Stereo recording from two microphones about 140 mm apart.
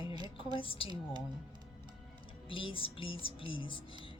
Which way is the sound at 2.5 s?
40° left (ahead or behind).